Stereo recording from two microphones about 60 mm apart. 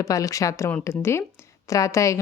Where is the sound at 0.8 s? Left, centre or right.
Left.